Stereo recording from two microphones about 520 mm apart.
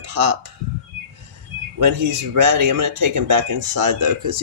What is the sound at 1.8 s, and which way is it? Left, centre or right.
Speech, right.